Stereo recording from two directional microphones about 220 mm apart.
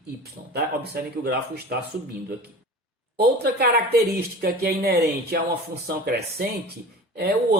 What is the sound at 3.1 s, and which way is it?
A woman's voice, 45° right (ahead or behind).